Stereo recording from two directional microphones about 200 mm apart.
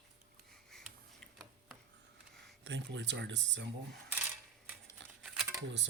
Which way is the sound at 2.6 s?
60° right (ahead or behind).